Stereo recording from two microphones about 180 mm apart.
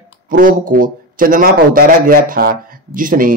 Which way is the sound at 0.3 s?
50° right (ahead or behind).